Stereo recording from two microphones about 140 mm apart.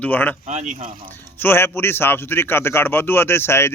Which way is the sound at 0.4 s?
60° right (ahead or behind).